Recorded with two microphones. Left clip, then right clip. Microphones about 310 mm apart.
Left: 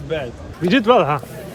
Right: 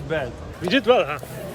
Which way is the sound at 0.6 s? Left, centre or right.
Centre.